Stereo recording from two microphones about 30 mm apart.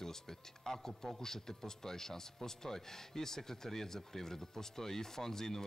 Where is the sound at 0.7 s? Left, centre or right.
Centre.